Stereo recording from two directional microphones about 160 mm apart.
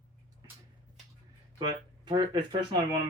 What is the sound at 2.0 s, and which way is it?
Speech, 25° right (ahead or behind).